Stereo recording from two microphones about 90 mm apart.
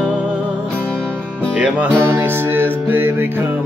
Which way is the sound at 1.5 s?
15° right (ahead or behind).